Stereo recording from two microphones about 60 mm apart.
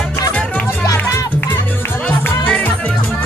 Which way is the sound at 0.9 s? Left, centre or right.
Left.